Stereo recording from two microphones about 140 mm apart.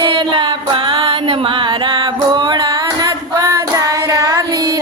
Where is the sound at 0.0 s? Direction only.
35° right (ahead or behind).